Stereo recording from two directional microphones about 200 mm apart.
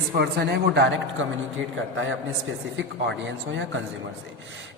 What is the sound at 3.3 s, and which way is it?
Speech, 70° right (ahead or behind).